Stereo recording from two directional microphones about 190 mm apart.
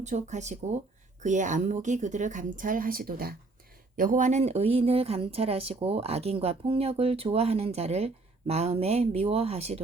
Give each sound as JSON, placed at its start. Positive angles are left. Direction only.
{"t": 0.0, "sound": "speech", "side_deg": -40}